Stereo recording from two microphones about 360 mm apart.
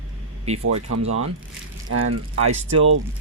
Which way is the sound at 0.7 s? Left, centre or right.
Right.